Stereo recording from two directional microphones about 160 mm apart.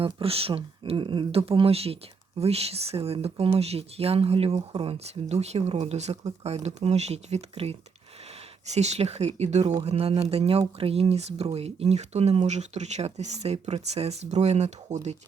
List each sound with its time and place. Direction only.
0.0 s speech: 35° right (ahead or behind)